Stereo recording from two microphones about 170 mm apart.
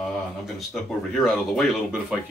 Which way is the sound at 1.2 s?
Centre (ahead or behind).